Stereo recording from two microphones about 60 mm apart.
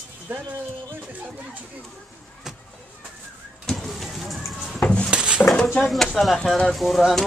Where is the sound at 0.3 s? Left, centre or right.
Right.